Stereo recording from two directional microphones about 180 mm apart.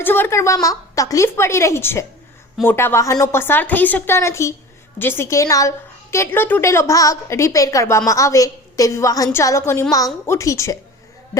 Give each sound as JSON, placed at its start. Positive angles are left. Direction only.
{"t": 0.0, "sound": "a woman's voice", "side_deg": 10}